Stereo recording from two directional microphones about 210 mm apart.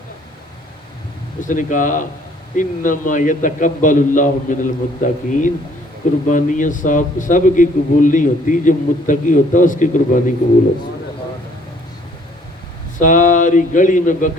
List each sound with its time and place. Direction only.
1.4 s a man's voice: 40° left (ahead or behind)
13.0 s a man's voice: 40° left (ahead or behind)